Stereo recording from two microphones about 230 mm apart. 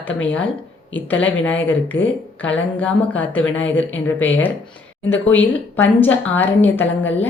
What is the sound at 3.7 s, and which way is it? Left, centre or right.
Speech, left.